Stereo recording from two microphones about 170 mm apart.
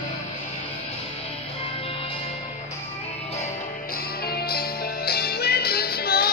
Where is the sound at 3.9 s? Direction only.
65° left (ahead or behind).